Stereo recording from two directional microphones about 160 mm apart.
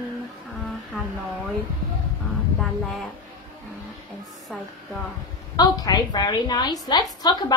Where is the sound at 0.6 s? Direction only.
Centre (ahead or behind).